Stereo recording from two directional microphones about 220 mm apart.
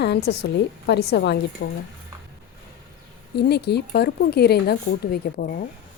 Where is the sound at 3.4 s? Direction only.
50° left (ahead or behind).